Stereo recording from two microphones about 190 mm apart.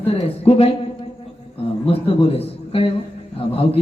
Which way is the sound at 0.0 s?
30° left (ahead or behind).